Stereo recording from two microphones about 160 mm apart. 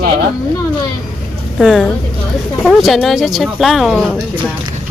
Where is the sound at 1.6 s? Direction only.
5° right (ahead or behind).